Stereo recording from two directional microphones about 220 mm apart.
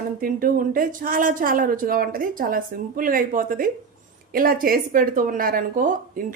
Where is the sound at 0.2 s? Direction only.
40° right (ahead or behind).